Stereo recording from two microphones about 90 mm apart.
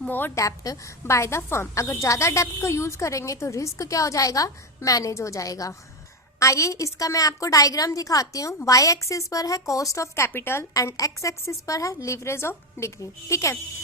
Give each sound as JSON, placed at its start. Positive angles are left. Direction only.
{"t": 0.1, "sound": "a woman's voice", "side_deg": 20}
{"t": 0.3, "sound": "a woman's voice", "side_deg": 40}